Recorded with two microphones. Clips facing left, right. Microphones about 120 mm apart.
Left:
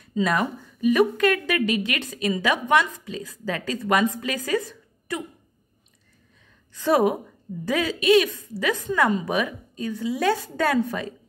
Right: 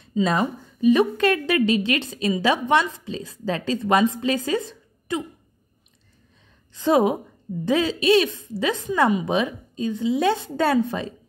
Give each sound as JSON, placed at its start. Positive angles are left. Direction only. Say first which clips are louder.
{"t": 0.2, "sound": "a woman's voice", "louder": "right 2 dB", "side_deg": -25}
{"t": 6.7, "sound": "a woman's voice", "louder": "right 1 dB", "side_deg": -20}